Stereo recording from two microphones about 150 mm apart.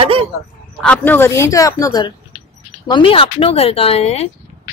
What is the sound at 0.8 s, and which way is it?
Speech, 10° left (ahead or behind).